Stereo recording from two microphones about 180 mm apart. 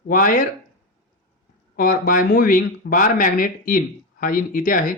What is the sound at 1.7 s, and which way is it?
Speech, 50° left (ahead or behind).